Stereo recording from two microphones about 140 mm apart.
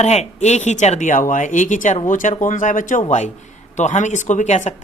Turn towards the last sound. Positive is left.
turn(degrees=55)  # may be behind; listen again after turning